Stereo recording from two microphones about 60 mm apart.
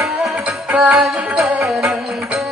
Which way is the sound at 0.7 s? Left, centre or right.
Right.